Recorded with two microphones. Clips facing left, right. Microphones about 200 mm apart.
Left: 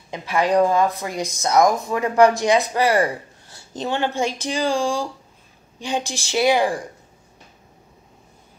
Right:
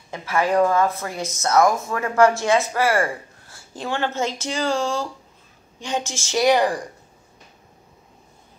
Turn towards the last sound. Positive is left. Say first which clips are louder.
# even
turn(degrees=10)  # may be behind; listen again after turning